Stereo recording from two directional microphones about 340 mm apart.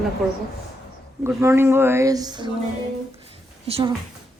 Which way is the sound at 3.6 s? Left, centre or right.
Centre.